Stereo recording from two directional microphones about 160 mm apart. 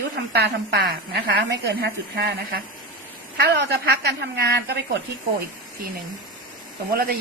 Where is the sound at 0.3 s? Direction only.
90° right; by 2.6 s 75° right (ahead or behind).